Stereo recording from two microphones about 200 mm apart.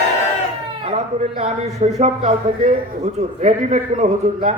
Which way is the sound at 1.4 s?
35° right (ahead or behind).